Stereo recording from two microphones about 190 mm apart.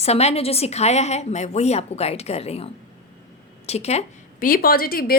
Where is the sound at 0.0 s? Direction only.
35° left (ahead or behind).